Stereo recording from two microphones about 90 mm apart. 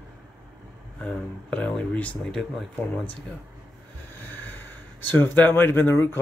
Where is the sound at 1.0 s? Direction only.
10° left (ahead or behind).